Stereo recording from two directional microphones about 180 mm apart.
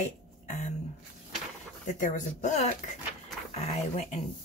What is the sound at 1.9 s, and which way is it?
Speech, 45° left (ahead or behind).